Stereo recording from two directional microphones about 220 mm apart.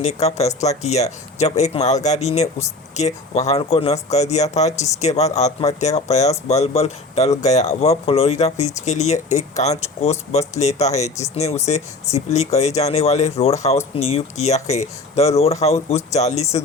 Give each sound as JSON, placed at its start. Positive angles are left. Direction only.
{"t": 0.0, "sound": "speech", "side_deg": 30}